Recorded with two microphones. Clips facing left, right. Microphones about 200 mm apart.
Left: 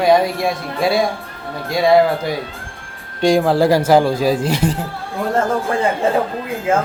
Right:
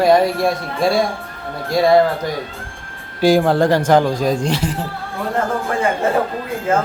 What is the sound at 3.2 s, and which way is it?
Speech, centre (ahead or behind).